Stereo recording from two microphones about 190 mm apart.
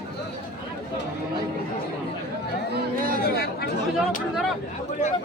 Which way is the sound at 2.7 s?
50° right (ahead or behind).